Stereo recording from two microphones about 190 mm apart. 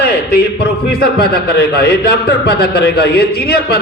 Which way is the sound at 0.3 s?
55° left (ahead or behind).